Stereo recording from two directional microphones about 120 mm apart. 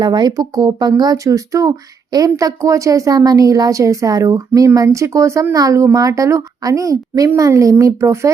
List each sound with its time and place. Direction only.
0.0 s speech: 35° right (ahead or behind)